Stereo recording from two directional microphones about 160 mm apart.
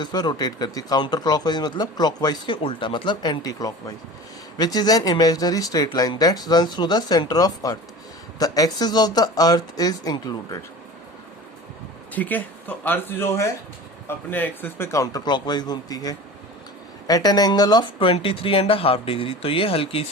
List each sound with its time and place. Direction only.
0.0 s speech: 25° left (ahead or behind)
12.1 s speech: 10° left (ahead or behind); by 20.1 s 35° left (ahead or behind)